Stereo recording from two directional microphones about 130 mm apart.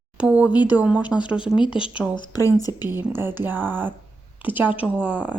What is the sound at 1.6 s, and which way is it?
Speech, 40° left (ahead or behind).